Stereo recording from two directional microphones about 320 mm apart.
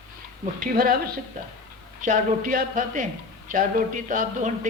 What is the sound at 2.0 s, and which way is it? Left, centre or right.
A man's voice, right.